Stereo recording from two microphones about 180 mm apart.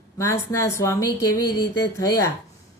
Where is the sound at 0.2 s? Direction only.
15° left (ahead or behind).